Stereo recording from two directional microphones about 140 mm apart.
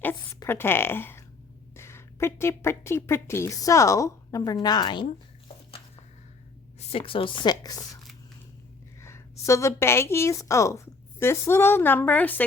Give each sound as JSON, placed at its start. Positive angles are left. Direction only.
{"t": 0.4, "sound": "a woman's voice", "side_deg": 15}
{"t": 6.7, "sound": "speech", "side_deg": 40}
{"t": 9.0, "sound": "a woman's voice", "side_deg": 20}